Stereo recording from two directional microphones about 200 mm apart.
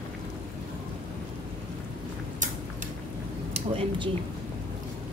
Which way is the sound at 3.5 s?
30° right (ahead or behind).